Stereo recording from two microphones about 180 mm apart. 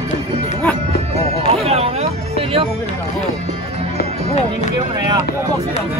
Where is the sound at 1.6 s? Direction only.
35° right (ahead or behind).